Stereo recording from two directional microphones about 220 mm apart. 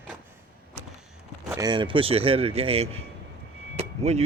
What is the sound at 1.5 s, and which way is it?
Speech, 15° right (ahead or behind).